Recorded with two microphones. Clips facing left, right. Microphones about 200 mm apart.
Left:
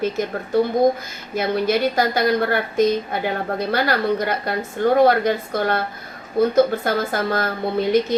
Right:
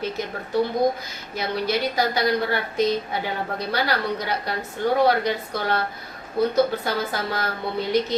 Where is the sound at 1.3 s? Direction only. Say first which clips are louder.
Left 5 dB; 50° left (ahead or behind).